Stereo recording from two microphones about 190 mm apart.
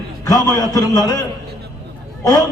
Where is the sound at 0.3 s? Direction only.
20° left (ahead or behind).